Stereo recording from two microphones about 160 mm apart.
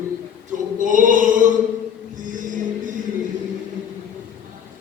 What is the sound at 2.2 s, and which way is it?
Music, 55° right (ahead or behind).